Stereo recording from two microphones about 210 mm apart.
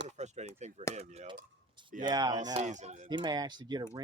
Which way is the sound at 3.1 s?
20° right (ahead or behind).